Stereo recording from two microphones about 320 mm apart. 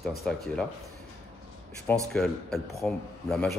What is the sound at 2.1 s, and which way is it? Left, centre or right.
A man's voice, centre.